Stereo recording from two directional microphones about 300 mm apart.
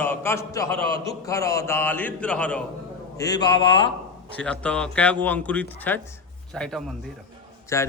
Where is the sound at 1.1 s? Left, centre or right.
Centre.